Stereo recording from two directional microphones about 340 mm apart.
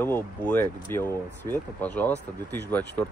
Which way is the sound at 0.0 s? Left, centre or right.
Centre.